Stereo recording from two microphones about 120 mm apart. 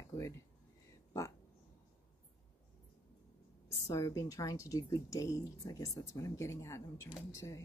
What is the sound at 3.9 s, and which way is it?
Speech, 25° left (ahead or behind).